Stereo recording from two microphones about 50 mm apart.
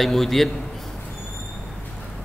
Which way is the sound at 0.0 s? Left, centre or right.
Centre.